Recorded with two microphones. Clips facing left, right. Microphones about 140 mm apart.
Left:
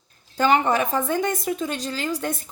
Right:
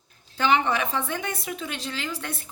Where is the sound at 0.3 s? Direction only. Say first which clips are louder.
Left 3 dB; 45° left (ahead or behind).